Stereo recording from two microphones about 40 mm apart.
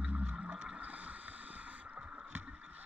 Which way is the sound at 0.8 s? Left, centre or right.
Right.